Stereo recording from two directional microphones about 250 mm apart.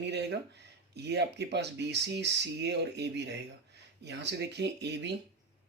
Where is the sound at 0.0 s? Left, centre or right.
Right.